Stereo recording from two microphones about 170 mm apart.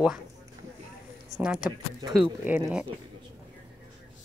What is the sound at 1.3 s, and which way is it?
Speech, 5° right (ahead or behind).